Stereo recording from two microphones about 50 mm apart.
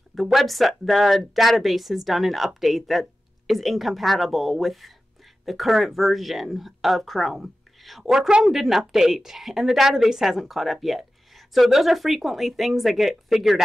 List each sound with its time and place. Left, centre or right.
0.1 s a woman's voice: centre
7.3 s whispering: centre
8.0 s a woman's voice: centre